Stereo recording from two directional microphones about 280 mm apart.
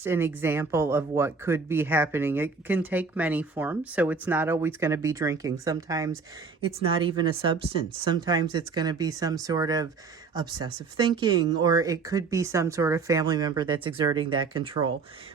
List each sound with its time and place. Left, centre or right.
0.0 s speech: centre